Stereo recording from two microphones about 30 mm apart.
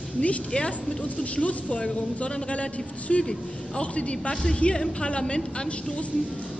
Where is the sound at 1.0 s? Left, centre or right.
Left.